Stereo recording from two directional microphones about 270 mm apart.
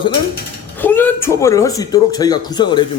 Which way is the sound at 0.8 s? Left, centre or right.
Centre.